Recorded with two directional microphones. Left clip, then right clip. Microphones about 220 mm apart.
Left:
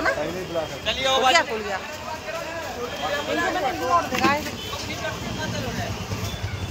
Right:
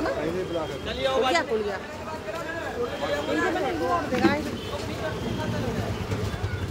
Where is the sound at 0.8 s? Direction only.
35° right (ahead or behind).